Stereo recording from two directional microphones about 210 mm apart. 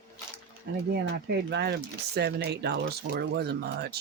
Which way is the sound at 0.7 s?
55° right (ahead or behind).